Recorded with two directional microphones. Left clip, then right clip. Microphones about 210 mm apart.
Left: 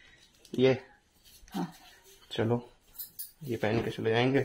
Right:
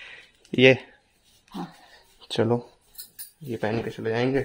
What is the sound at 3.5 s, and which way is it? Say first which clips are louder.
Speech: right 3 dB; 15° right (ahead or behind).